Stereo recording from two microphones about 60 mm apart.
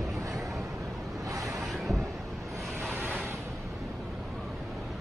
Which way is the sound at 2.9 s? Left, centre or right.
Right.